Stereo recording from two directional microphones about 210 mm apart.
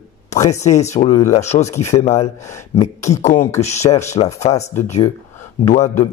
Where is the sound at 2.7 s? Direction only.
30° left (ahead or behind).